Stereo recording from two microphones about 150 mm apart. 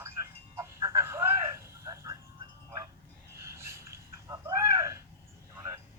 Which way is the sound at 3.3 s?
20° right (ahead or behind).